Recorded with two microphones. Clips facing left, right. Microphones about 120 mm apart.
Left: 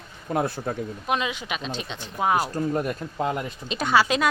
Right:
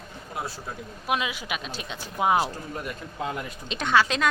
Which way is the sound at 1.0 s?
5° right (ahead or behind).